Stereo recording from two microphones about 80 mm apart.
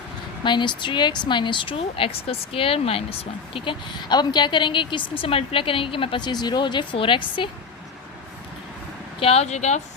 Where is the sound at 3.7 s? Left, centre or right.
Left.